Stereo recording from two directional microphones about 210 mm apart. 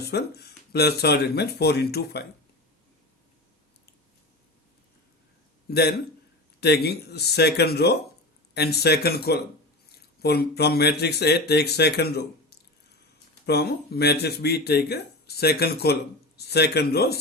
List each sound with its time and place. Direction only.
0.0 s speech: 50° left (ahead or behind)
5.7 s speech: 50° left (ahead or behind)